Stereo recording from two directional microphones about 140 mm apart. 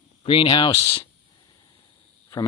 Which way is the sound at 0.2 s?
40° left (ahead or behind).